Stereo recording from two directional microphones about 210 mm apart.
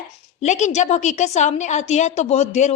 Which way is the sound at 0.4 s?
35° left (ahead or behind).